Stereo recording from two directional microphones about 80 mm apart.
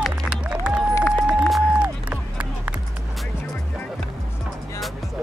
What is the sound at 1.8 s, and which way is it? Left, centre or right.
Run, centre.